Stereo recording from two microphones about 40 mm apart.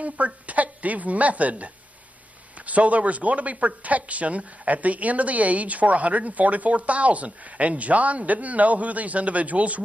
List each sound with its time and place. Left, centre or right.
0.0 s a woman's voice: right